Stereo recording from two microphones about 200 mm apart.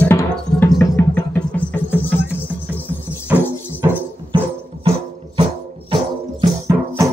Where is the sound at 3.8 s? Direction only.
15° right (ahead or behind).